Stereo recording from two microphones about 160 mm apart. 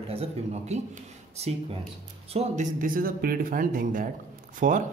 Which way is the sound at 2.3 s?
50° right (ahead or behind).